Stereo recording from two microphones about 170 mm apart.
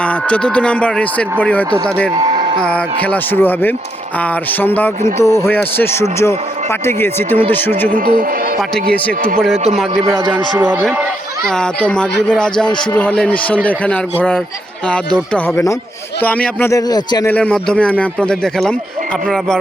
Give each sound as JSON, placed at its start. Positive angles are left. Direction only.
{"t": 0.0, "sound": "a man's voice", "side_deg": 5}
{"t": 2.2, "sound": "a sound", "side_deg": -30}
{"t": 2.6, "sound": "a man's voice", "side_deg": 5}
{"t": 7.9, "sound": "speech", "side_deg": -55}
{"t": 10.3, "sound": "speech", "side_deg": -10}
{"t": 11.4, "sound": "a man's voice", "side_deg": 5}
{"t": 17.2, "sound": "a man's voice", "side_deg": 10}